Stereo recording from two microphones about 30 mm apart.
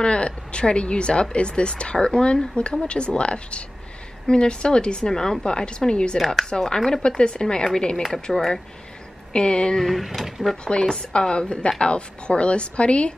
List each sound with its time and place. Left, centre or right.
0.0 s speech: left
2.6 s a woman's voice: left; by 5.4 s centre
5.4 s a woman's voice: left
6.1 s speech: centre
6.5 s a woman's voice: left
7.0 s a woman's voice: left
9.3 s speech: left
9.8 s speech: centre
10.6 s speech: left